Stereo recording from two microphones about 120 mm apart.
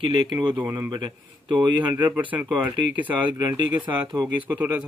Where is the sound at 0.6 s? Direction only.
35° right (ahead or behind).